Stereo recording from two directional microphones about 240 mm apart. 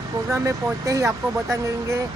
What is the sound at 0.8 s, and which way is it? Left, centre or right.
Speech, centre.